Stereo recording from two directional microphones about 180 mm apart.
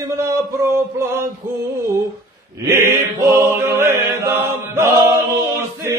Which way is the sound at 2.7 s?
15° right (ahead or behind).